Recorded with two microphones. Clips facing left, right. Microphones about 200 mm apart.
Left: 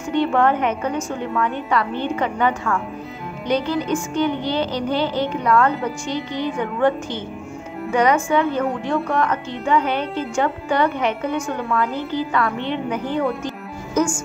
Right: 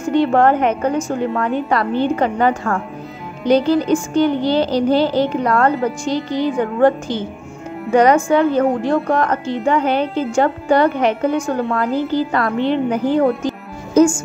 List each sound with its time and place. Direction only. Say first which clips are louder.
0.1 s speech: right 4 dB; 40° right (ahead or behind)
13.5 s music: right 5 dB; 30° right (ahead or behind)